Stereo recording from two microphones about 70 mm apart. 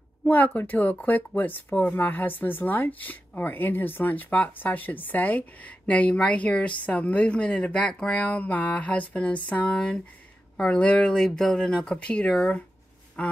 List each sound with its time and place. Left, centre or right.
0.5 s speech: left; by 12.6 s centre